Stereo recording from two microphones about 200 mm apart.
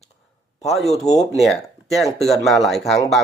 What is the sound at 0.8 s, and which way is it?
Speech, centre (ahead or behind).